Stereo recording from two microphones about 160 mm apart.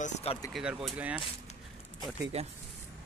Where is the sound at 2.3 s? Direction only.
40° right (ahead or behind).